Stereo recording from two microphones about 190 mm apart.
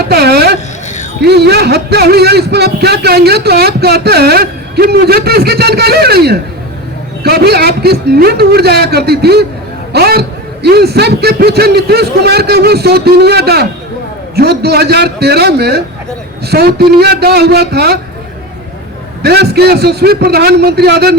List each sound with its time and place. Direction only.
0.1 s a sound: 55° right (ahead or behind)
1.2 s a man's voice: 60° right (ahead or behind)
19.2 s a man's voice: 60° right (ahead or behind)